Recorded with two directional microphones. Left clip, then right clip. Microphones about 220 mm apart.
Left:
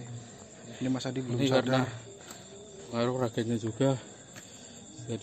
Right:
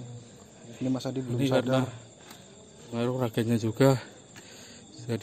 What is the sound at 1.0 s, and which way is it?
Speech, 20° right (ahead or behind).